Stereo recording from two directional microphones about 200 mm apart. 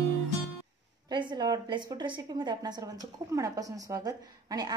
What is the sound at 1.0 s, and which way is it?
A woman's voice, 20° right (ahead or behind).